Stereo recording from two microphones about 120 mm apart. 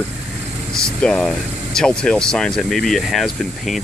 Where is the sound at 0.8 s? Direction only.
5° left (ahead or behind).